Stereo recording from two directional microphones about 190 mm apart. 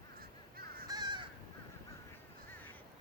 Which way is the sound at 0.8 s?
20° right (ahead or behind).